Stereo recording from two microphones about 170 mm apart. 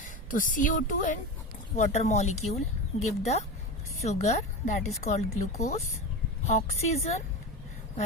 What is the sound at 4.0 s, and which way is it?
Speech, 40° left (ahead or behind).